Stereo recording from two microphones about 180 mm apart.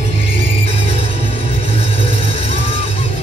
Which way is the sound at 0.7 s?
30° left (ahead or behind).